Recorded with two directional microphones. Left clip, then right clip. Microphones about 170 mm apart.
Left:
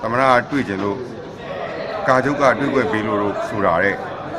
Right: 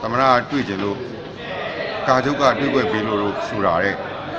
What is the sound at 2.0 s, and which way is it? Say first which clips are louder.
A man's voice: left 1 dB; 20° left (ahead or behind).